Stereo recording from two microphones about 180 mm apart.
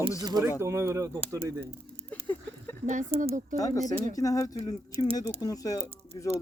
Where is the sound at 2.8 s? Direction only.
45° right (ahead or behind).